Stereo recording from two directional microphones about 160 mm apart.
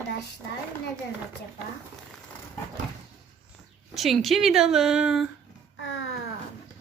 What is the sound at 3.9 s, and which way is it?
A woman's voice, centre (ahead or behind).